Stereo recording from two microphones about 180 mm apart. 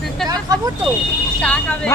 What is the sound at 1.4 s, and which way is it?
Speech, 5° left (ahead or behind).